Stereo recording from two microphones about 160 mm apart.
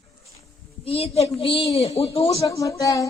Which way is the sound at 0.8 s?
40° left (ahead or behind).